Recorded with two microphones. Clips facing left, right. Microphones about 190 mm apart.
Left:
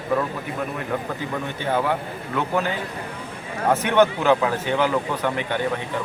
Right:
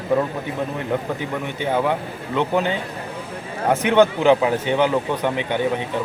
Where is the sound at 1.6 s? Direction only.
15° right (ahead or behind).